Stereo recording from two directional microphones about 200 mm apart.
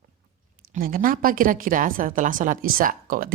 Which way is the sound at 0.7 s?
45° right (ahead or behind).